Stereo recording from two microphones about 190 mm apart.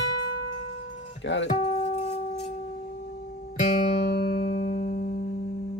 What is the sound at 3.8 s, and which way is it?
Music, 30° left (ahead or behind).